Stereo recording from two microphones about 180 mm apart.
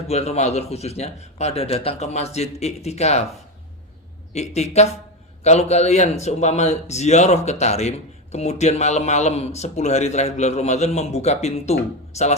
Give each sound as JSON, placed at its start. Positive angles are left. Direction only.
{"t": 0.1, "sound": "a man's voice", "side_deg": 35}
{"t": 4.4, "sound": "a man's voice", "side_deg": 40}